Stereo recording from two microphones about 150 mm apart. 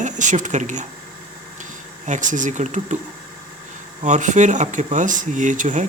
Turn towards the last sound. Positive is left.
turn(degrees=-60)  # may be behind; listen again after turning